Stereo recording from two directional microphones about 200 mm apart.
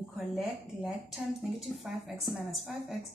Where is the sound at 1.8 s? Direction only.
Centre (ahead or behind).